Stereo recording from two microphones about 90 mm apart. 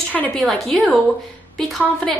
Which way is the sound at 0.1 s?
20° left (ahead or behind).